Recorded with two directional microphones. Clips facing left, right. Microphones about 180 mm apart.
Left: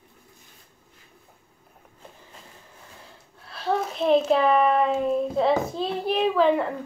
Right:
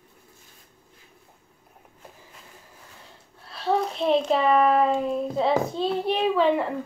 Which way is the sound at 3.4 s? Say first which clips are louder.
Right 2 dB; centre (ahead or behind).